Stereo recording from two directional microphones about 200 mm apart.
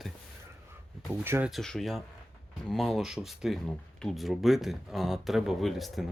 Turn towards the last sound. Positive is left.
turn(degrees=0)  # may be behind; listen again after turning